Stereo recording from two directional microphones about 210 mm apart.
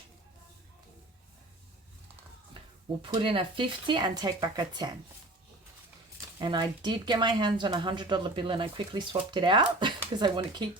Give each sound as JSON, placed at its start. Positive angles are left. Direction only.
{"t": 3.0, "sound": "speech", "side_deg": -25}
{"t": 6.4, "sound": "speech", "side_deg": -20}